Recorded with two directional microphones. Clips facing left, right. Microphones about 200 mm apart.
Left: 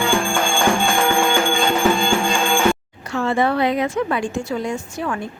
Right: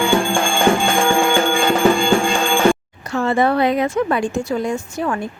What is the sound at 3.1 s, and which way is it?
A woman's voice, 40° right (ahead or behind).